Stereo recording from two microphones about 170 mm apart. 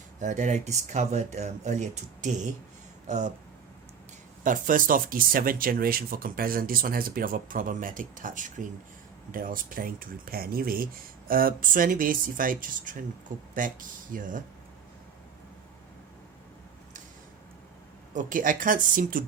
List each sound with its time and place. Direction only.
0.2 s speech: 45° right (ahead or behind)
4.4 s speech: 50° right (ahead or behind)
18.1 s speech: 50° right (ahead or behind)